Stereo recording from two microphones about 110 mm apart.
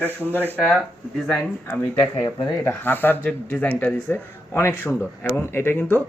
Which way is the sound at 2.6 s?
20° left (ahead or behind).